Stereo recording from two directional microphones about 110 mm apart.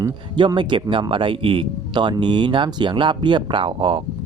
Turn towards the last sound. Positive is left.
turn(degrees=-50)  # may be behind; listen again after turning